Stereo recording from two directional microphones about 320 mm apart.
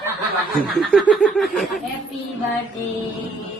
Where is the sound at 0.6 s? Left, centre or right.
Centre.